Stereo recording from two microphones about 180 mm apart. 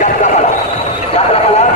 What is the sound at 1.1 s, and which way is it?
Horse, 35° left (ahead or behind).